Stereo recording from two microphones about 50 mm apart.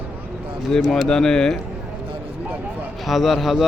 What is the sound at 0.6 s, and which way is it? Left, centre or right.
Speech, centre.